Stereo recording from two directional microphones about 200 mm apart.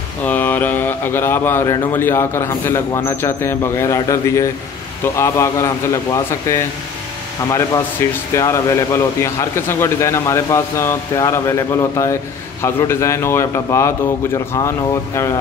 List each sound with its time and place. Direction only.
0.2 s speech: 10° left (ahead or behind)
8.0 s speech: 15° left (ahead or behind)